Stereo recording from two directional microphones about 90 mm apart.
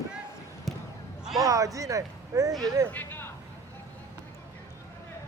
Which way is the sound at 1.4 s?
40° right (ahead or behind).